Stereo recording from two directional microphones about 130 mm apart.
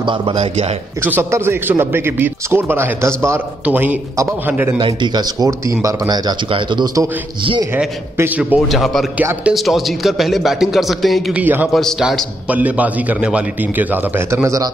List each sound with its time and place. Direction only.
0.0 s speech: 40° right (ahead or behind)
1.0 s a man's voice: 15° right (ahead or behind)
4.7 s speech: 35° right (ahead or behind)
7.7 s a man's voice: 10° right (ahead or behind)
8.6 s a man's voice: centre (ahead or behind)
11.3 s a man's voice: 10° right (ahead or behind)
11.7 s a man's voice: centre (ahead or behind); by 14.7 s 25° right (ahead or behind)